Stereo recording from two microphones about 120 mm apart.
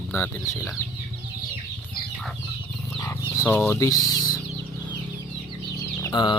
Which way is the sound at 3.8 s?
30° left (ahead or behind).